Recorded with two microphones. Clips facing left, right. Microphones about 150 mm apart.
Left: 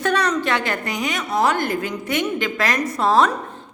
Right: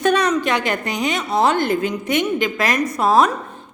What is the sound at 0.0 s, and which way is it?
A woman's voice, 15° right (ahead or behind).